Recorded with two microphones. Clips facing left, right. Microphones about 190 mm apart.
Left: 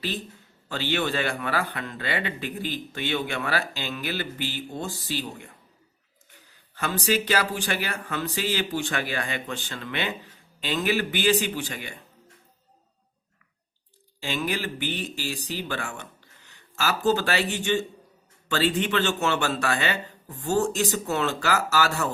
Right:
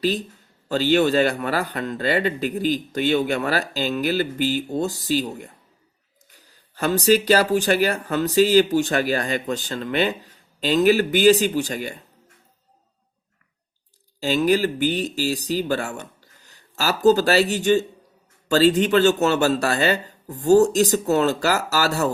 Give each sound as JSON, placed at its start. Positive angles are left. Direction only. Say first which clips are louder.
{"t": 0.7, "sound": "a man's voice", "louder": "right 9 dB", "side_deg": -40}
{"t": 6.7, "sound": "a man's voice", "louder": "right 8 dB", "side_deg": -40}
{"t": 14.2, "sound": "a man's voice", "louder": "right 10 dB", "side_deg": -40}